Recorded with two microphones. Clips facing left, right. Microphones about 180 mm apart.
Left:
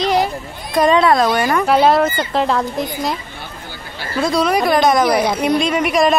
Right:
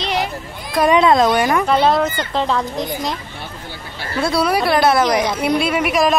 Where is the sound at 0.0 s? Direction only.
40° left (ahead or behind).